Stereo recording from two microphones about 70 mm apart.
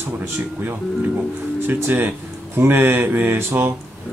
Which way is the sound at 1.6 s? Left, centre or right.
Right.